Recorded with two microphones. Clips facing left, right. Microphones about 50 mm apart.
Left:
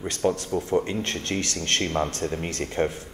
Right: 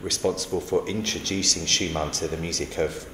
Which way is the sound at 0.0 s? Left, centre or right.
Left.